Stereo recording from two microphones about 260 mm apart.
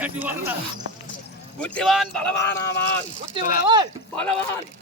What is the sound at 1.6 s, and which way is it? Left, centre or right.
Speech, centre.